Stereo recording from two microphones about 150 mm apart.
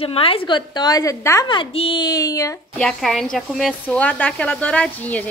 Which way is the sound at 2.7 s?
5° left (ahead or behind).